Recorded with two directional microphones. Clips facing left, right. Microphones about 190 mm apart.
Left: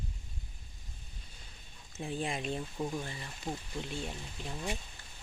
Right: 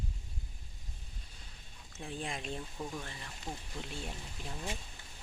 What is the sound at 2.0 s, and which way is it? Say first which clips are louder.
Speech: left 5 dB; 5° left (ahead or behind).